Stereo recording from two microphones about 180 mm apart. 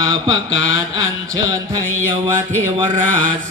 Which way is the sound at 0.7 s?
20° right (ahead or behind).